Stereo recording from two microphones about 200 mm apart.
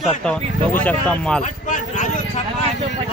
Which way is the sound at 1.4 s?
40° left (ahead or behind).